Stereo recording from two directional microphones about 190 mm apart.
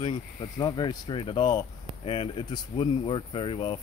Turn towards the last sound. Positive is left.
turn(degrees=25)  # may be behind; listen again after turning